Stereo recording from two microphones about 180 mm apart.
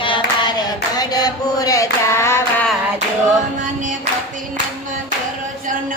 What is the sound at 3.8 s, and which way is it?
Clapping, 45° right (ahead or behind).